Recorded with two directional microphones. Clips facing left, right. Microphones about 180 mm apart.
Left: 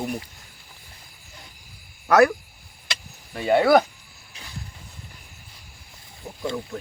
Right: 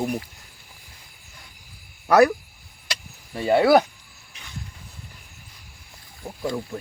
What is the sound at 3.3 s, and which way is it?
Speech, 30° right (ahead or behind).